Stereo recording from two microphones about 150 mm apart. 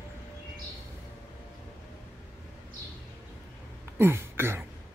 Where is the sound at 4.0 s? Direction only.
15° right (ahead or behind).